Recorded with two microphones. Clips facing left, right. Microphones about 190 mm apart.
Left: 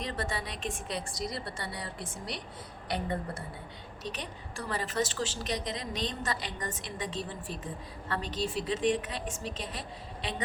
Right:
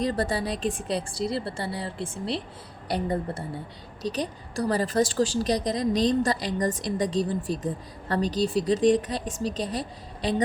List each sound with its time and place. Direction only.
0.0 s a woman's voice: 35° right (ahead or behind)